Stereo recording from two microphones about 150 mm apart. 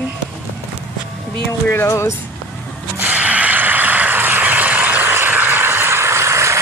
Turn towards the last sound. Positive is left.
turn(degrees=-20)  # may be behind; listen again after turning